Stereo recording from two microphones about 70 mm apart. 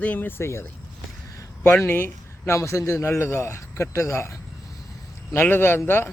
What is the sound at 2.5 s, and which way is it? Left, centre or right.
Speech, left.